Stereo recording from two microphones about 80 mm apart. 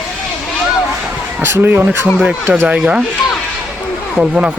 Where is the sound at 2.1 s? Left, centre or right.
Centre.